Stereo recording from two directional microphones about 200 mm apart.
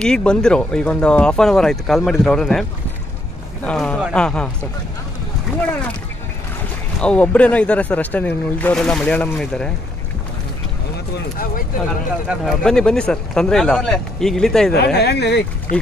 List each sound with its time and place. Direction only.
0.0 s speech: 5° left (ahead or behind)
3.6 s speech: 5° left (ahead or behind)
7.0 s speech: 5° left (ahead or behind)
12.3 s speech: centre (ahead or behind)
15.0 s speech: 55° left (ahead or behind)
15.7 s speech: 40° left (ahead or behind)